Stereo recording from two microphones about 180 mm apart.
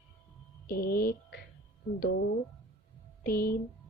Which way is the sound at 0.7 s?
55° left (ahead or behind).